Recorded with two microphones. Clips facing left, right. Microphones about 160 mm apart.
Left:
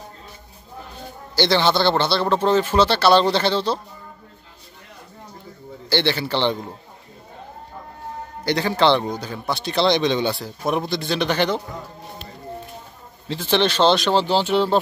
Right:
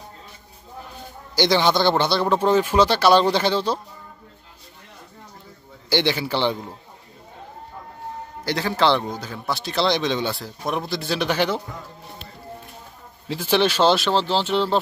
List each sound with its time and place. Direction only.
1.3 s speech: 15° right (ahead or behind)
5.9 s speech: 15° right (ahead or behind)
8.5 s a man's voice: centre (ahead or behind)
13.3 s a man's voice: 10° right (ahead or behind)